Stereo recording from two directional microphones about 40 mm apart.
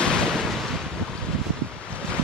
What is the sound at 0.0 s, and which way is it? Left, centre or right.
Wind noise, centre.